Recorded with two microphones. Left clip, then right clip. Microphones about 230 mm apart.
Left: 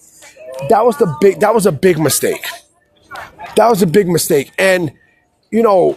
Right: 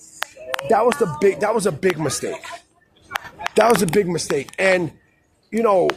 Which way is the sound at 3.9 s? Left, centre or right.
Left.